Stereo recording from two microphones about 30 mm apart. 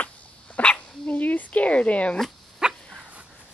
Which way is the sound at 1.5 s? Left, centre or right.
Left.